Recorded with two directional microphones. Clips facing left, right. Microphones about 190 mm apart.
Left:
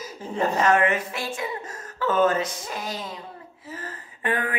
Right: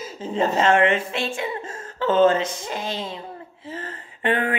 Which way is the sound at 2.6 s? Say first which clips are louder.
Right 3 dB; 25° right (ahead or behind).